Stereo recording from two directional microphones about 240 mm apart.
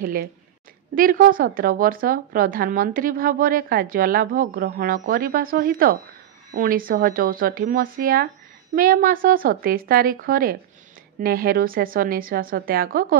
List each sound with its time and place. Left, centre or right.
0.0 s speech: right